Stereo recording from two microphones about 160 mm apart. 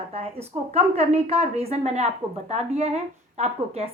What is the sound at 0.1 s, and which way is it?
A woman's voice, 40° right (ahead or behind).